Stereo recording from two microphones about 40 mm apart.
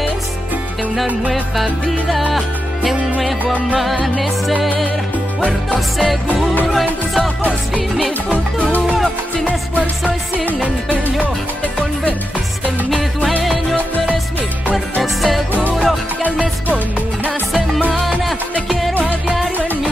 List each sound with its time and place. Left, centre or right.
1.3 s music: centre
6.7 s music: centre
15.0 s music: centre
16.6 s music: left
18.7 s music: centre